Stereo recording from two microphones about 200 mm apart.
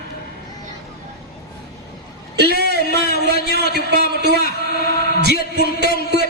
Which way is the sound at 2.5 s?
55° right (ahead or behind).